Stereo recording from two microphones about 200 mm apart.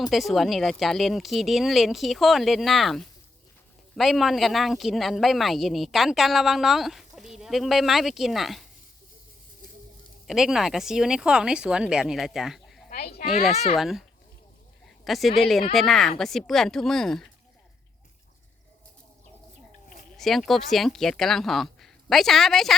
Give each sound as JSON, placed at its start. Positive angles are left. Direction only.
{"t": 0.1, "sound": "speech", "side_deg": 0}
{"t": 10.2, "sound": "speech", "side_deg": 0}
{"t": 12.9, "sound": "a child's voice", "side_deg": 50}
{"t": 13.4, "sound": "speech", "side_deg": 0}
{"t": 15.0, "sound": "speech", "side_deg": 0}
{"t": 20.1, "sound": "speech", "side_deg": 0}